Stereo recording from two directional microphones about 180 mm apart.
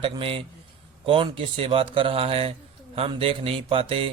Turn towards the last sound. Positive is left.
turn(degrees=-30)  # may be behind; listen again after turning